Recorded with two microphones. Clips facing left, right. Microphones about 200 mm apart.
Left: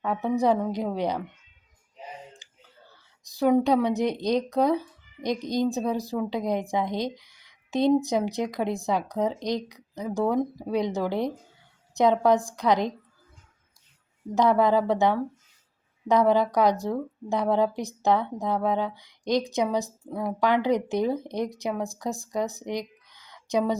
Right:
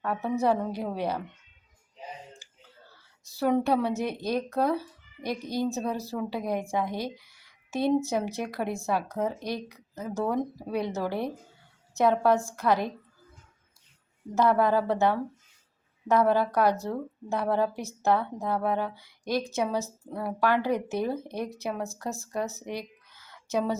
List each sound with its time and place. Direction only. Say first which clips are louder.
0.0 s speech: left 3 dB; 15° left (ahead or behind)
3.2 s speech: left 4 dB; 15° left (ahead or behind)
14.3 s speech: left 2 dB; 15° left (ahead or behind)